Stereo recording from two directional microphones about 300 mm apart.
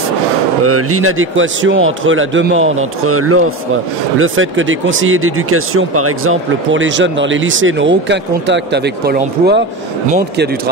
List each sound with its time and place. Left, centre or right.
0.7 s speech: right